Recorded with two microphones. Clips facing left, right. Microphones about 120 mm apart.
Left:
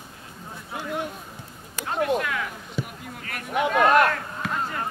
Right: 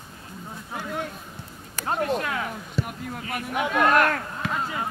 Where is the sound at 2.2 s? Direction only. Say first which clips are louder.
Even; 35° right (ahead or behind).